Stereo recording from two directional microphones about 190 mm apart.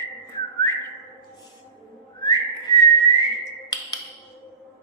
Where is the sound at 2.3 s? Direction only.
20° left (ahead or behind).